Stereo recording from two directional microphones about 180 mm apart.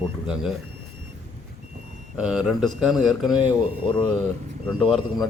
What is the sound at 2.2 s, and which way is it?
Speech, 5° right (ahead or behind).